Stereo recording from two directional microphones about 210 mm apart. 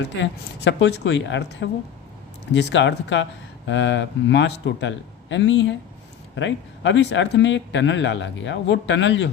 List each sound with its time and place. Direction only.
0.0 s speech: 60° left (ahead or behind)